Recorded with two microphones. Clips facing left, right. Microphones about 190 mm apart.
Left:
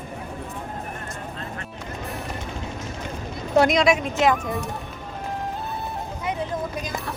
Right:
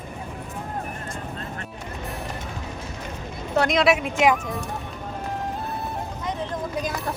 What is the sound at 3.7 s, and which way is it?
Speech, 5° right (ahead or behind).